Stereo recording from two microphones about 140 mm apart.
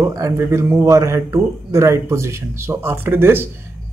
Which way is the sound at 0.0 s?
20° right (ahead or behind).